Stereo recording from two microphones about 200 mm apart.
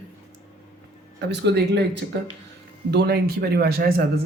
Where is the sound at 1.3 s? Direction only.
55° right (ahead or behind).